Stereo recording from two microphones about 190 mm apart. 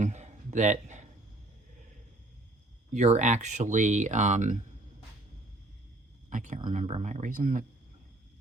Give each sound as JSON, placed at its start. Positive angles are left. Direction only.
{"t": 0.0, "sound": "a sound", "side_deg": -40}
{"t": 2.9, "sound": "speech", "side_deg": -40}
{"t": 6.3, "sound": "speech", "side_deg": -40}